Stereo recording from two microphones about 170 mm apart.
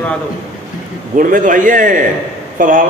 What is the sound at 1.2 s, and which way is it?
A man's voice, 50° right (ahead or behind).